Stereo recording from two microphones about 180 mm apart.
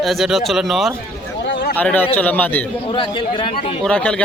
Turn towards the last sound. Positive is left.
turn(degrees=5)  # may be behind; listen again after turning